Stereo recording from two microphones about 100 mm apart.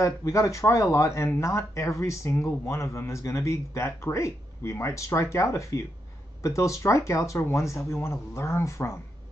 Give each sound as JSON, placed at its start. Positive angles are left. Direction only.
{"t": 0.0, "sound": "speech", "side_deg": 30}